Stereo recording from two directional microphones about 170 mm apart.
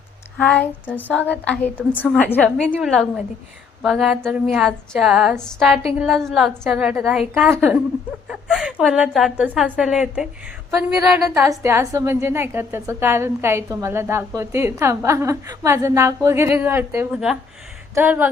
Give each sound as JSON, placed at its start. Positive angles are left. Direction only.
{"t": 0.3, "sound": "a woman's voice", "side_deg": 5}
{"t": 11.4, "sound": "a woman's voice", "side_deg": -15}